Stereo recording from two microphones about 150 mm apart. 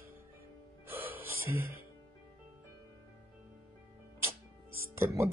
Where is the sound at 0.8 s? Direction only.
15° right (ahead or behind).